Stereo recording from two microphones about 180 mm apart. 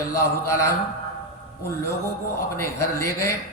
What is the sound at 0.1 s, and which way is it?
Speech, 15° left (ahead or behind).